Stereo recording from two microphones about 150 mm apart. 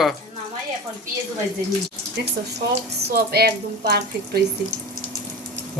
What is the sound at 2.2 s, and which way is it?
Speech, 90° right.